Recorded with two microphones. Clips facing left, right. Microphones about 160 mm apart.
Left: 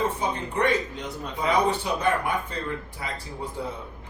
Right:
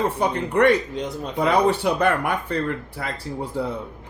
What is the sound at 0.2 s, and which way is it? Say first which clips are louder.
Speech: right 7 dB; 65° right (ahead or behind).